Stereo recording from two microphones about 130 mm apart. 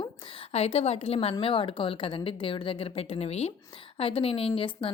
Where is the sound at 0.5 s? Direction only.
50° left (ahead or behind).